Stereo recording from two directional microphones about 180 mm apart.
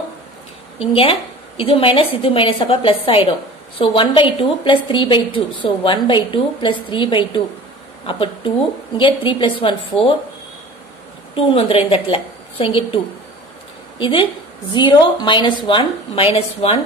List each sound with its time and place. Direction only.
0.7 s a woman's voice: 30° left (ahead or behind)
11.3 s a woman's voice: 30° left (ahead or behind)